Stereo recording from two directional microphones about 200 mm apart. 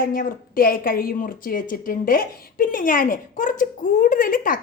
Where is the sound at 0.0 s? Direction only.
45° left (ahead or behind).